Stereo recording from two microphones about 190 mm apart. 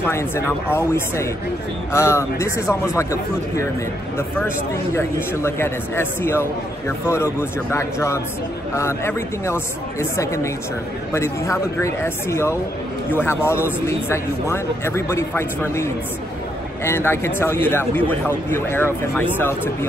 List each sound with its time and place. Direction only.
0.0 s a man's voice: 15° left (ahead or behind)
4.9 s a man's voice: 15° left (ahead or behind)